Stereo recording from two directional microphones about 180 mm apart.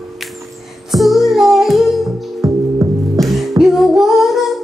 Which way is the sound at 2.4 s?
20° right (ahead or behind).